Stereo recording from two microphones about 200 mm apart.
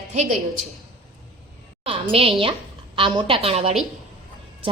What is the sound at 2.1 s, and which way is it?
A woman's voice, 30° right (ahead or behind).